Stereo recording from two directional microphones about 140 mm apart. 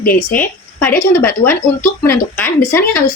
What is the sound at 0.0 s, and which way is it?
Speech, 90° left.